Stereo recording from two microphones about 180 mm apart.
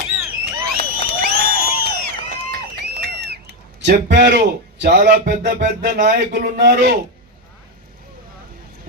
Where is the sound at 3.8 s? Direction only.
70° right (ahead or behind).